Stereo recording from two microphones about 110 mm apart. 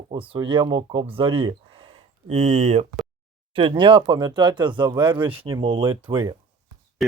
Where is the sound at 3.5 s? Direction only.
50° right (ahead or behind).